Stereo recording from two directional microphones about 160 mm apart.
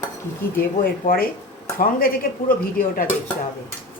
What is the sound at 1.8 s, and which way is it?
Speech, 65° left (ahead or behind).